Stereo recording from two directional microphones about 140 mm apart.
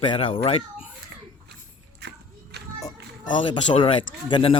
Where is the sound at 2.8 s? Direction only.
35° left (ahead or behind).